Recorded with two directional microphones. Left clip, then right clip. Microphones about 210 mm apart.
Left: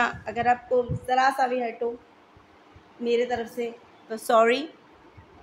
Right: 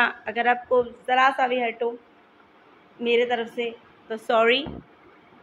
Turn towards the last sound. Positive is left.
turn(degrees=15)  # may be behind; listen again after turning